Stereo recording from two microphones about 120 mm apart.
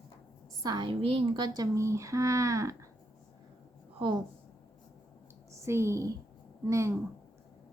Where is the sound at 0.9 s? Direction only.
50° right (ahead or behind); by 2.7 s 25° right (ahead or behind).